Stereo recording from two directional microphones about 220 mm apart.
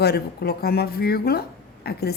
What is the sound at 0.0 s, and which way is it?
A woman's voice, 45° left (ahead or behind).